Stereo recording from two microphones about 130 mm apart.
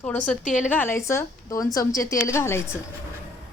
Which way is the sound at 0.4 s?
80° left.